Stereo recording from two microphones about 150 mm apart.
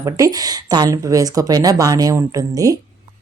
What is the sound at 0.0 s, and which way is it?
Speech, 25° right (ahead or behind).